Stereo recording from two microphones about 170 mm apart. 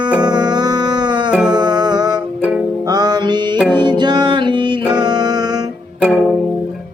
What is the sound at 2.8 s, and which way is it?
Music, 25° right (ahead or behind).